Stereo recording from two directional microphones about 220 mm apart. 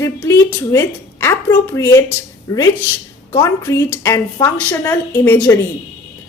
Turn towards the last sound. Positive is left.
turn(degrees=10)  # may be behind; listen again after turning